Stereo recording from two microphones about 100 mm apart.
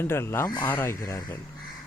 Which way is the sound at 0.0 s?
25° left (ahead or behind).